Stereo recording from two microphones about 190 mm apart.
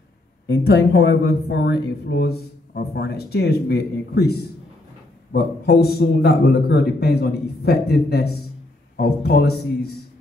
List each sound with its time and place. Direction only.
0.5 s speech: 60° left (ahead or behind)